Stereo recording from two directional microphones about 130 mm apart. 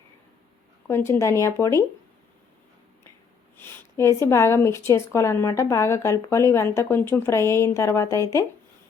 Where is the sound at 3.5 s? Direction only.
20° left (ahead or behind).